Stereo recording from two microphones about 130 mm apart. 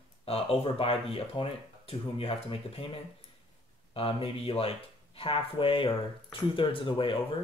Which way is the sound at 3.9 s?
45° left (ahead or behind).